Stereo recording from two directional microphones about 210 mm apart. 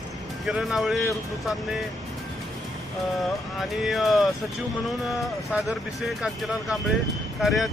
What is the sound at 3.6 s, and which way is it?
Speech, centre (ahead or behind).